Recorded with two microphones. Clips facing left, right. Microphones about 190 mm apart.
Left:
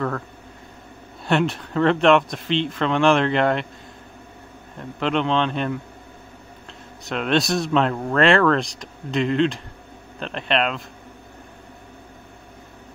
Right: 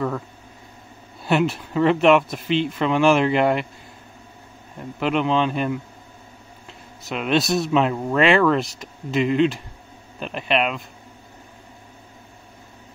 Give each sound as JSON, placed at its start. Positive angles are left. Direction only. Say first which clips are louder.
{"t": 1.2, "sound": "speech", "louder": "right 1 dB", "side_deg": -5}
{"t": 5.0, "sound": "a man's voice", "louder": "right 1 dB", "side_deg": -5}
{"t": 7.1, "sound": "speech", "louder": "even", "side_deg": -5}